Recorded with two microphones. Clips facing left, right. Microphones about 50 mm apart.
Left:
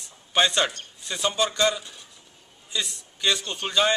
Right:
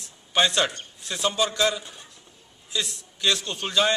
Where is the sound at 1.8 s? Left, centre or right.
Right.